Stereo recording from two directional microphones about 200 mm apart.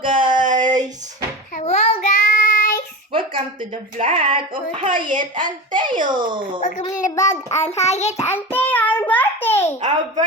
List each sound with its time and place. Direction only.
0.0 s a sound: 25° right (ahead or behind)
1.5 s child singing: 35° left (ahead or behind)
3.1 s a woman's voice: 25° right (ahead or behind)
5.0 s a woman's voice: 40° right (ahead or behind)
5.7 s a child's voice: 25° right (ahead or behind)
6.6 s a child's voice: 40° left (ahead or behind)
7.0 s child singing: 15° left (ahead or behind)
7.7 s a child's voice: 35° left (ahead or behind)
8.2 s a sound: 10° left (ahead or behind)